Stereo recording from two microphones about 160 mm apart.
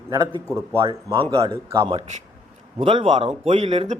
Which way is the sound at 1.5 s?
20° right (ahead or behind).